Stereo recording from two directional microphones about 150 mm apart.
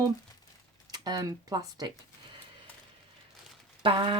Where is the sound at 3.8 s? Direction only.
35° right (ahead or behind).